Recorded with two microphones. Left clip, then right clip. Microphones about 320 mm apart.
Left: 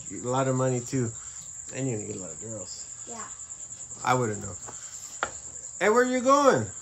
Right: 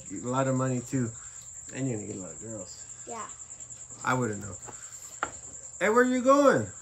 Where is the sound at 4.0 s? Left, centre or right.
Centre.